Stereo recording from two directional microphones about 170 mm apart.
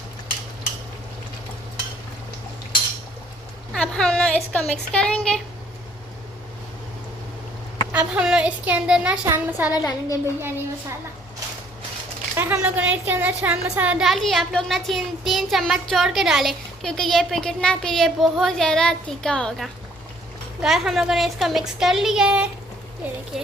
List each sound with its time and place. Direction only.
3.7 s speech: 5° left (ahead or behind)
7.9 s speech: 5° right (ahead or behind)
9.7 s a child's voice: 20° left (ahead or behind)
10.4 s speech: 15° right (ahead or behind)
12.4 s a woman's voice: 10° right (ahead or behind)